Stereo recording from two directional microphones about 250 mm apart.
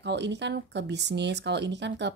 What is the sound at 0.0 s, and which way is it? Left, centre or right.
Speech, right.